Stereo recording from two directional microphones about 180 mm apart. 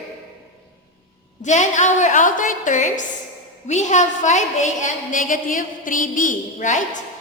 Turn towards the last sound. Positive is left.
turn(degrees=45)  # may be behind; listen again after turning